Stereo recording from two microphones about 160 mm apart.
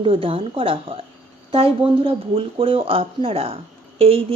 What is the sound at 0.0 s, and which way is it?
Speech, 35° right (ahead or behind).